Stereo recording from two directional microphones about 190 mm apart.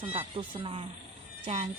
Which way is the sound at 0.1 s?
30° right (ahead or behind).